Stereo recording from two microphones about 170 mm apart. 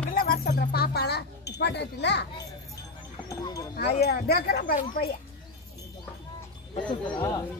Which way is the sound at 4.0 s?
70° left (ahead or behind).